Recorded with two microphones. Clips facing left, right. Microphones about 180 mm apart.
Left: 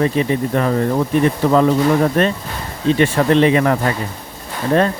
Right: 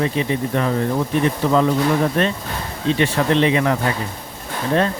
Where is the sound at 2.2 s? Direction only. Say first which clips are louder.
Left 3 dB; 50° left (ahead or behind).